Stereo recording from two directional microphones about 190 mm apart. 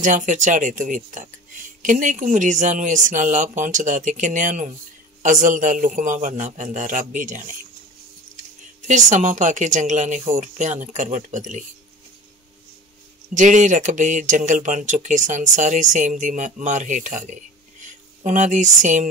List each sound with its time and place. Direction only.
0.0 s speech: 40° right (ahead or behind)
13.3 s speech: 40° right (ahead or behind)